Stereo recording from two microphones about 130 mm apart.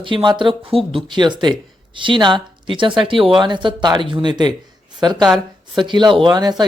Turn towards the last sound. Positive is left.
turn(degrees=-30)  # may be behind; listen again after turning